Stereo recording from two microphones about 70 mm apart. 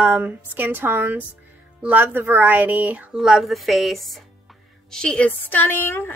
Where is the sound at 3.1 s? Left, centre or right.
Centre; by 5.9 s left.